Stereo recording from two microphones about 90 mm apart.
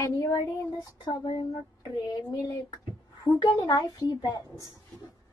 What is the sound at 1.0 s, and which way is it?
Speech, 50° left (ahead or behind).